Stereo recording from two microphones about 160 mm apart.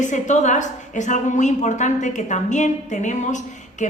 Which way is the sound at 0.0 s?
50° left (ahead or behind).